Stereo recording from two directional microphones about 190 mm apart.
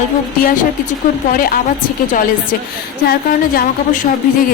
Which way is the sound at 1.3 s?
50° left (ahead or behind).